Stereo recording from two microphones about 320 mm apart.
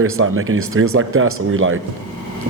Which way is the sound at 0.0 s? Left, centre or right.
Right.